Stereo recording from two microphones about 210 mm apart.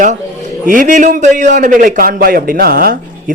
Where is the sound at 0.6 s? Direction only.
40° right (ahead or behind).